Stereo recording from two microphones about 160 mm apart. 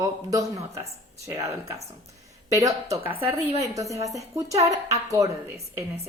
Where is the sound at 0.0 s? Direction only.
20° right (ahead or behind).